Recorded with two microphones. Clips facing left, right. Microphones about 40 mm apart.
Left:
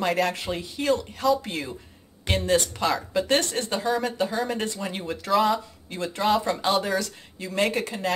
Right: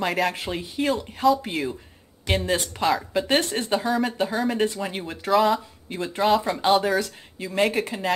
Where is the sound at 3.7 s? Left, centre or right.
Centre.